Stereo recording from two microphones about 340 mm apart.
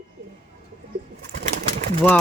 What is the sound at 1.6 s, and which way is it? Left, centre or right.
Pigeon, right.